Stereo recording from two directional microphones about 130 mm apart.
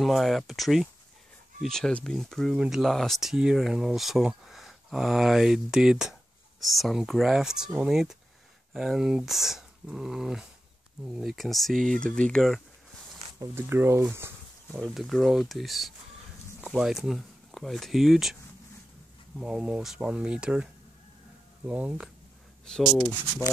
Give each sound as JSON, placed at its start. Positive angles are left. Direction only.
{"t": 0.0, "sound": "speech", "side_deg": 0}
{"t": 13.4, "sound": "speech", "side_deg": -20}
{"t": 14.8, "sound": "speech", "side_deg": 0}
{"t": 21.6, "sound": "speech", "side_deg": -10}